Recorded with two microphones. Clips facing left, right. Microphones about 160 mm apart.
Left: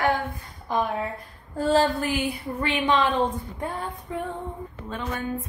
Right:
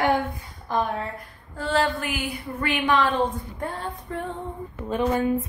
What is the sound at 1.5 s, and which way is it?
A woman's voice, 40° left (ahead or behind).